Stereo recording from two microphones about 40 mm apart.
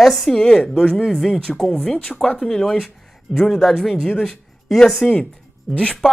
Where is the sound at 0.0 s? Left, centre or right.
Centre.